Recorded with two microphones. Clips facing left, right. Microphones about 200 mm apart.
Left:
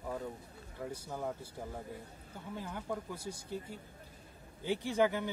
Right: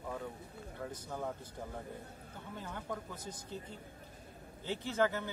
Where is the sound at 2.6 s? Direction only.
10° left (ahead or behind).